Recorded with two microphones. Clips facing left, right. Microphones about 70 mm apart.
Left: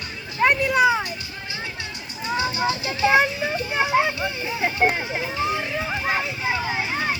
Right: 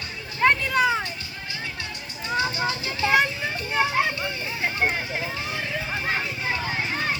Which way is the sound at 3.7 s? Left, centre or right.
Centre.